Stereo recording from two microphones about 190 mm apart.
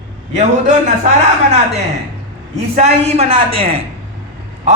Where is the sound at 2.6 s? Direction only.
35° right (ahead or behind).